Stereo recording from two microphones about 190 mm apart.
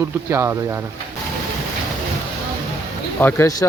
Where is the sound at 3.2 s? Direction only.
15° left (ahead or behind).